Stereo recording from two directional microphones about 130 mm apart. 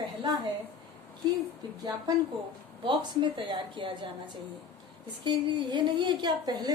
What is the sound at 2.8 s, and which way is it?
A woman's voice, 40° right (ahead or behind).